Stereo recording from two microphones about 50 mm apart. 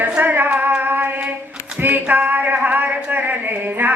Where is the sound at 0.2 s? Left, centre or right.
Right.